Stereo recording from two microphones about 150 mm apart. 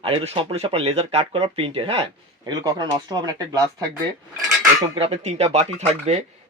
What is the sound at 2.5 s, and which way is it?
Speech, 25° right (ahead or behind).